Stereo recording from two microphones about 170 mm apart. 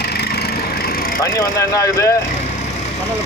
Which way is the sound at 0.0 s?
75° left (ahead or behind).